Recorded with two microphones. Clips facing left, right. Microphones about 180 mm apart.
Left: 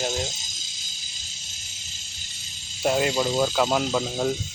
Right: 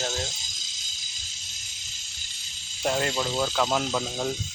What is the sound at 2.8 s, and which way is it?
Speech, 10° left (ahead or behind).